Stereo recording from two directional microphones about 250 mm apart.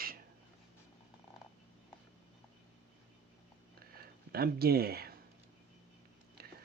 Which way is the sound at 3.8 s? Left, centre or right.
Right.